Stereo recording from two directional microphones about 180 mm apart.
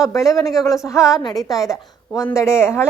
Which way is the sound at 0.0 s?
20° left (ahead or behind).